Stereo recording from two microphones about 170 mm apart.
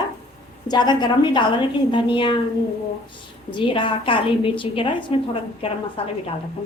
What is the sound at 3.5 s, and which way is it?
A woman's voice, 30° left (ahead or behind).